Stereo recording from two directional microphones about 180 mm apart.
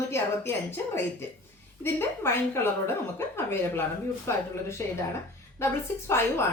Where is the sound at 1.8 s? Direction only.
15° left (ahead or behind).